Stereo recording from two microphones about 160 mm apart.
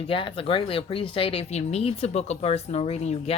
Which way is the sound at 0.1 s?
35° left (ahead or behind).